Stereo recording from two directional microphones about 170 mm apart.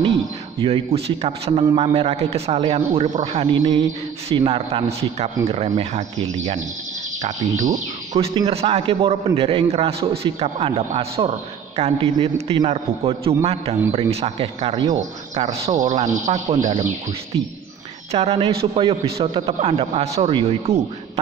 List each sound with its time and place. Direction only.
0.6 s a man's voice: 30° right (ahead or behind)
8.2 s a man's voice: 35° right (ahead or behind)
18.1 s a man's voice: 35° right (ahead or behind)